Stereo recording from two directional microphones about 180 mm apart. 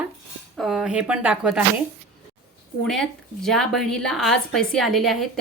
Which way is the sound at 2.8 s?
Centre (ahead or behind).